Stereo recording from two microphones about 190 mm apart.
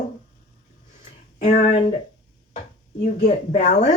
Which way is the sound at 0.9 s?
40° left (ahead or behind).